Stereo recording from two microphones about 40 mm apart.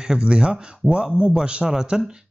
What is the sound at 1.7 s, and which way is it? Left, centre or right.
Speech, centre.